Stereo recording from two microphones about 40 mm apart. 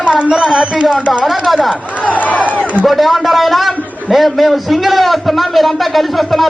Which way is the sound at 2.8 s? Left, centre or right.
Centre.